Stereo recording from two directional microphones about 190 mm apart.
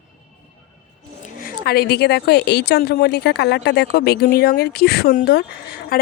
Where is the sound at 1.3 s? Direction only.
50° left (ahead or behind).